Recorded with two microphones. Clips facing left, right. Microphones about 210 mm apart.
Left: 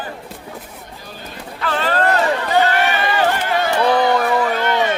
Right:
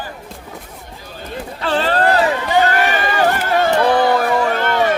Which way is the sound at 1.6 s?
30° right (ahead or behind).